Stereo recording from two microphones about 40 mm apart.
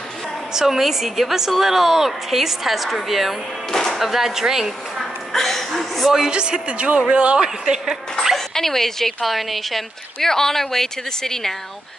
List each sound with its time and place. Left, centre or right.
0.5 s a woman's voice: centre
3.7 s music: centre
4.0 s a woman's voice: centre
4.9 s a sound: centre
6.1 s speech: centre
8.4 s speech: centre